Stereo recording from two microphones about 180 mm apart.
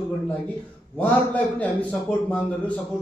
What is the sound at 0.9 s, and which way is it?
Speech, 10° left (ahead or behind).